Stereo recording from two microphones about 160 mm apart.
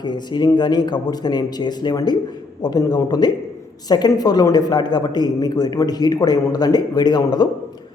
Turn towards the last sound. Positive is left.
turn(degrees=25)  # may be behind; listen again after turning